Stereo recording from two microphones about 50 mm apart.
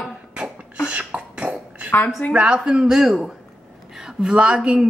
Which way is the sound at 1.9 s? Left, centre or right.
Left.